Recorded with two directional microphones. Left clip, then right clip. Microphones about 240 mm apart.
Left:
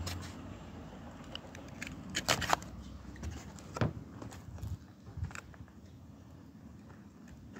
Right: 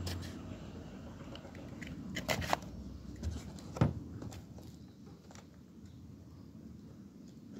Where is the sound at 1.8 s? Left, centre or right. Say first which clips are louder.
Left 5 dB; left.